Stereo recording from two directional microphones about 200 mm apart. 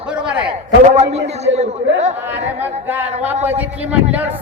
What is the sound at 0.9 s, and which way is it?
A man's voice, 35° right (ahead or behind).